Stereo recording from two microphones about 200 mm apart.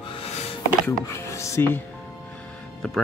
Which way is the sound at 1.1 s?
15° left (ahead or behind).